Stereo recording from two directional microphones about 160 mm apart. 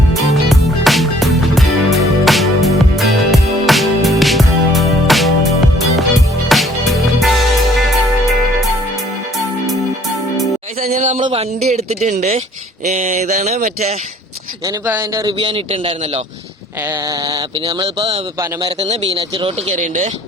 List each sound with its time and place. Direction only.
0.1 s music: centre (ahead or behind)
10.8 s a sound: 45° right (ahead or behind)
14.8 s speech: 15° right (ahead or behind)
15.2 s a man's voice: 30° right (ahead or behind)
17.2 s a man's voice: 30° right (ahead or behind)
19.7 s a sound: 50° right (ahead or behind)